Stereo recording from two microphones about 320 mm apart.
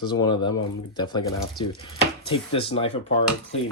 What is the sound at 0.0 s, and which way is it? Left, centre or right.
Speech, centre.